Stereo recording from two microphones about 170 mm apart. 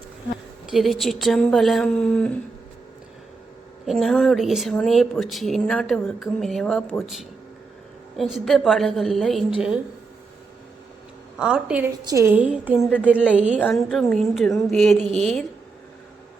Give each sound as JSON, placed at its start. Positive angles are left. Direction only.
{"t": 0.7, "sound": "speech", "side_deg": 0}
{"t": 3.8, "sound": "speech", "side_deg": 0}
{"t": 11.3, "sound": "a woman's voice", "side_deg": -5}
{"t": 13.6, "sound": "speech", "side_deg": 5}